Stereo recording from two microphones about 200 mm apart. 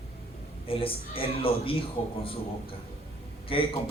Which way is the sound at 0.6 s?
25° left (ahead or behind).